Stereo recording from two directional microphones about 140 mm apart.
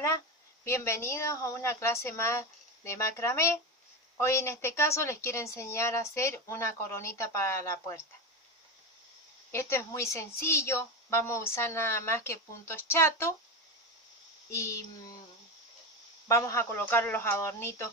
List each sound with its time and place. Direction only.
0.7 s a woman's voice: 20° left (ahead or behind)
9.5 s a woman's voice: 20° left (ahead or behind)
14.5 s a woman's voice: 20° left (ahead or behind)
16.3 s a woman's voice: 20° left (ahead or behind)